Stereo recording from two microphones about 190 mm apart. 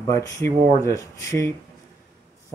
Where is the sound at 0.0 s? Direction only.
15° left (ahead or behind).